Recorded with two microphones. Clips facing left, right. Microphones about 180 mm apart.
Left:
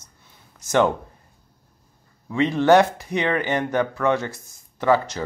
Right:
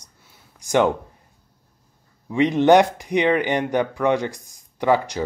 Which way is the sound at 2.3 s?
15° right (ahead or behind).